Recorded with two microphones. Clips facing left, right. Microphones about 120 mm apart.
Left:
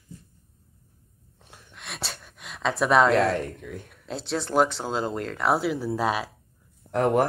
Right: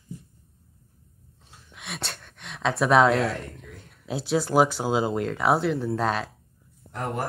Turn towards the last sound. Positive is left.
turn(degrees=65)  # may be behind; listen again after turning